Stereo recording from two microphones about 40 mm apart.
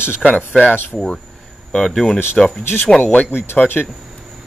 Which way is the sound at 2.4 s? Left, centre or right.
Centre.